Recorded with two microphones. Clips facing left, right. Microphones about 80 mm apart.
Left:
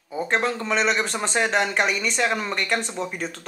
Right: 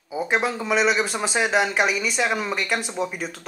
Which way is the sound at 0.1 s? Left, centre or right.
Centre.